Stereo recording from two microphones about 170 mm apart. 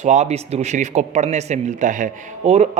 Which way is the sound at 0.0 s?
40° right (ahead or behind).